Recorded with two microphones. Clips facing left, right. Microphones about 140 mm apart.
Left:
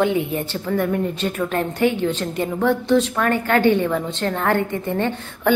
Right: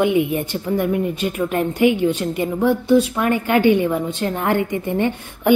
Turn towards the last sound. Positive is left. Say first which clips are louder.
# right 2 dB
turn(degrees=-15)  # may be behind; listen again after turning